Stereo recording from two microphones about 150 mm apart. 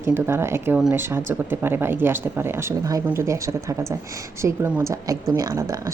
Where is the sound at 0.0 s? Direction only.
15° right (ahead or behind).